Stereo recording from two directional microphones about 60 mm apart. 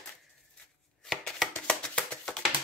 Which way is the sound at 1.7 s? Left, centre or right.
Centre.